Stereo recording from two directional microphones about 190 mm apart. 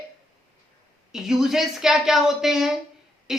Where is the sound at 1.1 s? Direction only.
Centre (ahead or behind).